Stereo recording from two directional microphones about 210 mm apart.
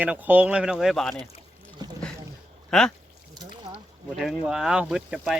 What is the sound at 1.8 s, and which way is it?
Boat, 20° right (ahead or behind).